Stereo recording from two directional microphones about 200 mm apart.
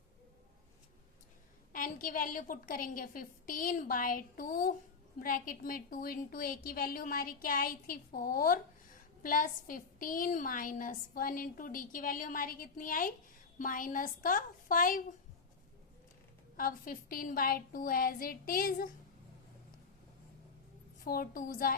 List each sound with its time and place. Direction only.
1.7 s a woman's voice: 40° left (ahead or behind)
16.6 s a woman's voice: 45° left (ahead or behind)
21.0 s a woman's voice: 45° left (ahead or behind)